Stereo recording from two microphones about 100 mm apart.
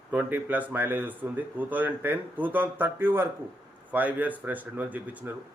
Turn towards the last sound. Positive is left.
turn(degrees=-15)  # may be behind; listen again after turning